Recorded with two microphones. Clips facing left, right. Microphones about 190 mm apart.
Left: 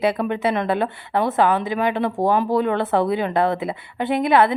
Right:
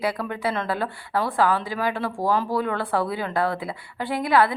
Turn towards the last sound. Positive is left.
turn(degrees=25)  # may be behind; listen again after turning